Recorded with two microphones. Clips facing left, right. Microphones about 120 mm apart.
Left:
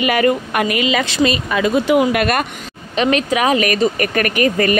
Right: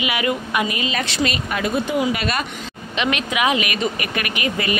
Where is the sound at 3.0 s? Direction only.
35° left (ahead or behind).